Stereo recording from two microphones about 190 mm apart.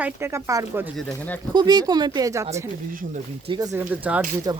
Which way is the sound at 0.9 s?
5° left (ahead or behind).